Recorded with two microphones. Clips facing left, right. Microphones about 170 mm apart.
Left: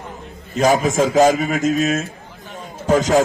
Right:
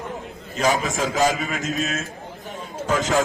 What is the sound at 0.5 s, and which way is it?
A man's voice, 45° left (ahead or behind).